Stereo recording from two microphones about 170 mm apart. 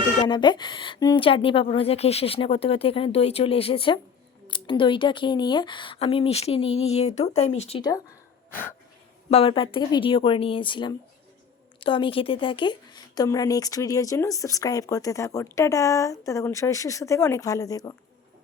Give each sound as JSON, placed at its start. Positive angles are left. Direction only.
{"t": 0.2, "sound": "speech", "side_deg": 25}
{"t": 7.8, "sound": "speech", "side_deg": 20}
{"t": 9.3, "sound": "speech", "side_deg": 35}